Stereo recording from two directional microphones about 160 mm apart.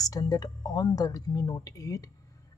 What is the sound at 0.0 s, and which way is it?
A woman's voice, 25° left (ahead or behind).